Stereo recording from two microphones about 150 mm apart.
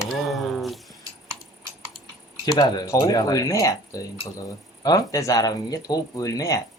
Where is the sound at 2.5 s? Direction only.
25° left (ahead or behind).